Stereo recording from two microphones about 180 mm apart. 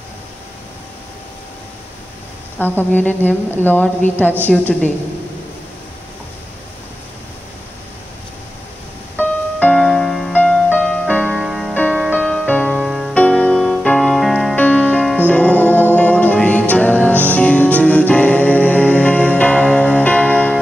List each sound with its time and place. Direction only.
2.6 s speech: 10° left (ahead or behind)
9.1 s music: 5° left (ahead or behind)
13.1 s music: 10° left (ahead or behind)